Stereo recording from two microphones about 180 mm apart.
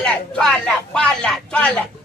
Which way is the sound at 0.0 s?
5° left (ahead or behind).